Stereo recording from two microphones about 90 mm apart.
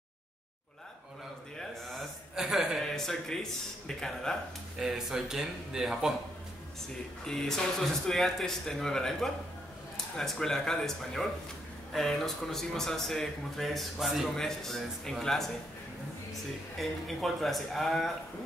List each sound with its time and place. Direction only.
1.6 s a sound: centre (ahead or behind)
3.8 s speech: 5° left (ahead or behind)
4.7 s speech: 5° right (ahead or behind)
7.2 s speech: 5° left (ahead or behind)
16.7 s speech: centre (ahead or behind)